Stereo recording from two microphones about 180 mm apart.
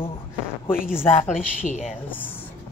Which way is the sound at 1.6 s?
45° left (ahead or behind).